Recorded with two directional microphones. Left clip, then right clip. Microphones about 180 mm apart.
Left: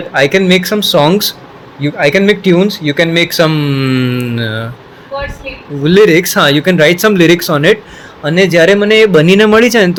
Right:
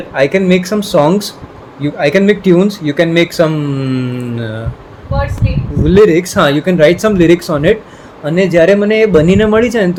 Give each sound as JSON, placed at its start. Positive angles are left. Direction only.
{"t": 0.1, "sound": "speech", "side_deg": 10}
{"t": 5.8, "sound": "speech", "side_deg": 15}